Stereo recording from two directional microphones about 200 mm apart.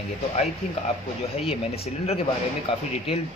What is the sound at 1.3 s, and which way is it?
Speech, 30° left (ahead or behind).